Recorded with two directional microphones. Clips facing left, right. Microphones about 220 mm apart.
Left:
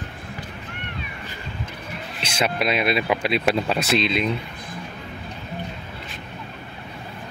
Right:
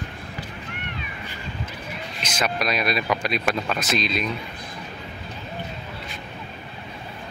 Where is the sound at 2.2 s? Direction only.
25° left (ahead or behind).